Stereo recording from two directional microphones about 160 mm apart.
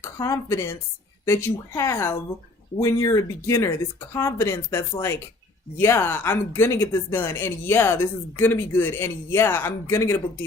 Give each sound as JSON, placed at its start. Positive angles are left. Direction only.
{"t": 0.0, "sound": "speech", "side_deg": 20}